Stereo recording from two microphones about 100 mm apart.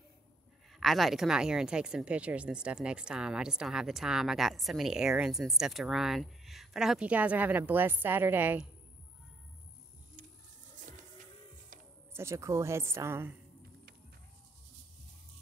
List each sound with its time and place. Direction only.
0.7 s speech: centre (ahead or behind); by 8.5 s 20° right (ahead or behind)
12.1 s a woman's voice: 25° right (ahead or behind)